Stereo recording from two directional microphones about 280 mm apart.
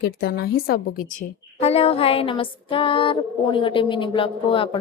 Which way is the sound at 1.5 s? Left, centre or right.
Left.